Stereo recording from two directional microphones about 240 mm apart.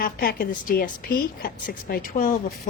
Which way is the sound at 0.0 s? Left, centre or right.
Left.